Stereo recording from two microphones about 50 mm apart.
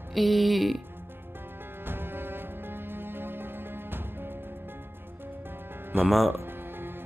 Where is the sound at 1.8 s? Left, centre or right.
Right.